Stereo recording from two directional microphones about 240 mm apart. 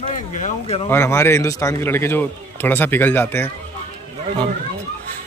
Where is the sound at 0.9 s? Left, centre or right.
Centre.